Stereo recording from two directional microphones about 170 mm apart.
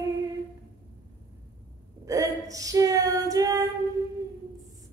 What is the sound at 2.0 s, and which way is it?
Female singing, 20° right (ahead or behind).